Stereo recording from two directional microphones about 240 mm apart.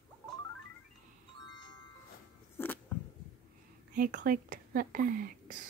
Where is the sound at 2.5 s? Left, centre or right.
Centre.